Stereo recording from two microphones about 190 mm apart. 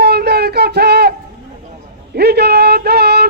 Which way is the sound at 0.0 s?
55° right (ahead or behind).